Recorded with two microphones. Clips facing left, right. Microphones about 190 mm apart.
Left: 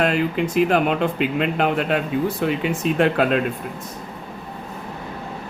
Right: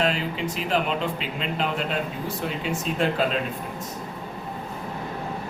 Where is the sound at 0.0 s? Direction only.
55° left (ahead or behind).